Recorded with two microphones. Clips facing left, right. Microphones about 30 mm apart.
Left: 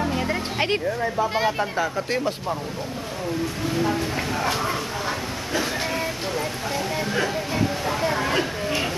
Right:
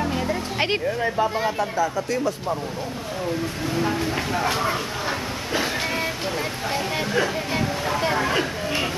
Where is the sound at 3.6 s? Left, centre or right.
Centre; by 7.0 s right.